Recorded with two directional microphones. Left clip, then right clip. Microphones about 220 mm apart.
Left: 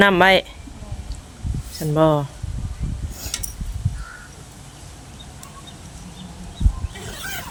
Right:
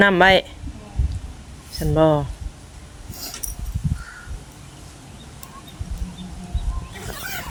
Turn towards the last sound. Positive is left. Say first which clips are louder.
# even
turn(degrees=-10)  # may be behind; listen again after turning